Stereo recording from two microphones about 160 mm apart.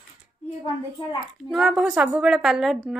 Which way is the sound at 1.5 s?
Centre (ahead or behind).